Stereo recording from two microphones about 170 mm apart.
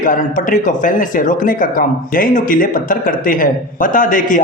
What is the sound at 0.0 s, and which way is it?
Speech, 50° left (ahead or behind).